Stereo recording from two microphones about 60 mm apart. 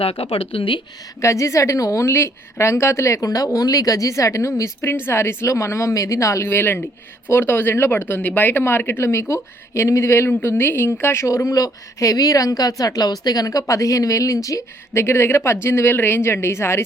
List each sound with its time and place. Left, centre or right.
1.2 s a woman's voice: left
4.8 s a woman's voice: left
6.5 s a woman's voice: left
11.4 s a woman's voice: left
14.9 s a woman's voice: left